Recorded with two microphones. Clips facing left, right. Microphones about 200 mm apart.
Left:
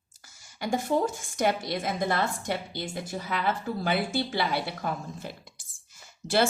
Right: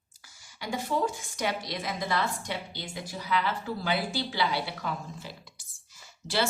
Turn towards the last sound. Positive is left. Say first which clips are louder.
# left 5 dB
turn(degrees=50)  # may be behind; listen again after turning